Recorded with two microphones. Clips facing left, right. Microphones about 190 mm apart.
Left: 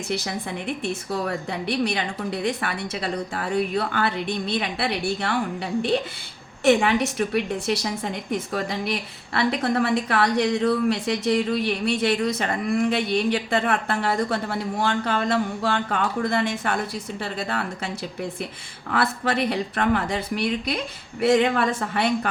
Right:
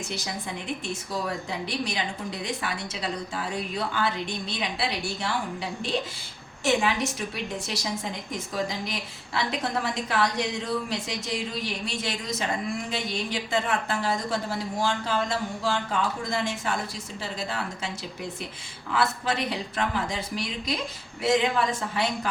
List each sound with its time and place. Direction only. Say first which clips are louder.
1.1 s a woman's voice: left 2 dB; 60° left (ahead or behind)
6.7 s a woman's voice: left 6 dB; 60° left (ahead or behind)